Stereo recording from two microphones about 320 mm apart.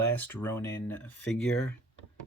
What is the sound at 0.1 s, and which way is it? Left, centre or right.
Speech, centre.